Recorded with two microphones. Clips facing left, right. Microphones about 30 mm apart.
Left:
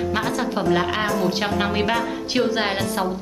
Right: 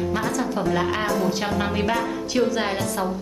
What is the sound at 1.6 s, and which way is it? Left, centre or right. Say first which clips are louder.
A woman's voice: left 2 dB; left.